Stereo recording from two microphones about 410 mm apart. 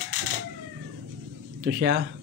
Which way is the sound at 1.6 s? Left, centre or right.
Right.